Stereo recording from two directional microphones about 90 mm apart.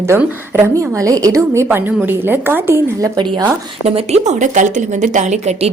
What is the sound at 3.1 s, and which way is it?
Speech, 60° right (ahead or behind).